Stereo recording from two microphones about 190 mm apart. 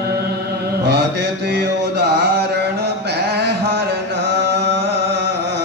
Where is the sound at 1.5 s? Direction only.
60° right (ahead or behind).